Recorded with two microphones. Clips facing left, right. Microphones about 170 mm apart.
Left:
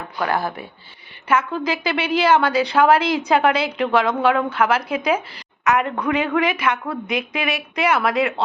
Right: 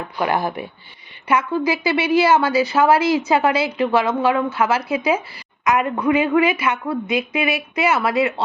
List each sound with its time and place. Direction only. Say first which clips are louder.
0.2 s a woman's voice: right 2 dB; 15° right (ahead or behind)